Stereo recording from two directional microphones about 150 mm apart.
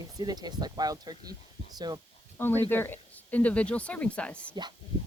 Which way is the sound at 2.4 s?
15° left (ahead or behind).